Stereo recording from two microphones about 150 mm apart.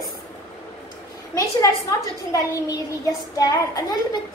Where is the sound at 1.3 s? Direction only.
25° left (ahead or behind).